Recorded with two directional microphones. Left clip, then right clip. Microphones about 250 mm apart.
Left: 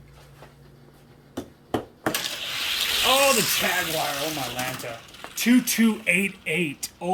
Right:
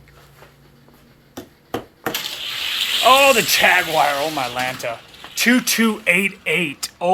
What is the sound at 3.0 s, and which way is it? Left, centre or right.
Speech, centre.